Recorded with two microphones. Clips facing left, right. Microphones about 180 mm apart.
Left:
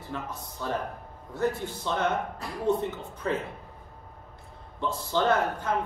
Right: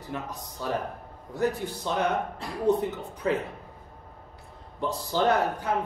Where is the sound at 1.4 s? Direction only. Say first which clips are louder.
Right 1 dB; 15° right (ahead or behind).